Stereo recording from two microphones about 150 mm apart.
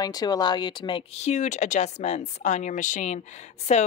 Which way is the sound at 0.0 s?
25° left (ahead or behind).